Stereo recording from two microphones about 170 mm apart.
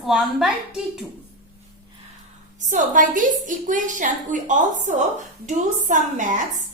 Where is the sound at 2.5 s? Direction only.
50° right (ahead or behind).